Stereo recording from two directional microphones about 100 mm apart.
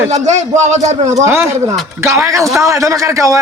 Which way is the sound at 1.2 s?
25° right (ahead or behind).